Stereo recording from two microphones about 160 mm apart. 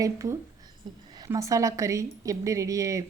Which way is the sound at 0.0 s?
20° right (ahead or behind).